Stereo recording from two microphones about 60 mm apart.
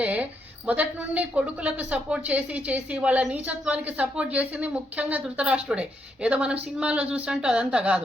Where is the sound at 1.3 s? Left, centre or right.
Right.